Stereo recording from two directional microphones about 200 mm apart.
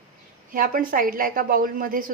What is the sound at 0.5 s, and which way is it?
A woman's voice, 45° right (ahead or behind).